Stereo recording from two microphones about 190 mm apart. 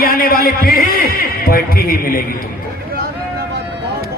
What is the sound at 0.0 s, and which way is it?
Music, 50° left (ahead or behind).